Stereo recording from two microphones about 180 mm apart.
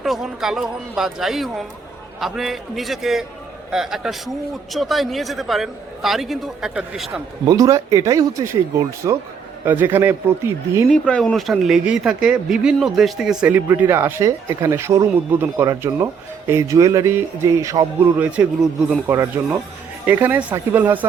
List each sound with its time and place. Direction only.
0.0 s speech: centre (ahead or behind)
7.4 s speech: 20° right (ahead or behind)
10.8 s speech: 5° left (ahead or behind); by 18.3 s 15° right (ahead or behind)
18.3 s speech: 5° right (ahead or behind)
19.0 s speech: 15° right (ahead or behind)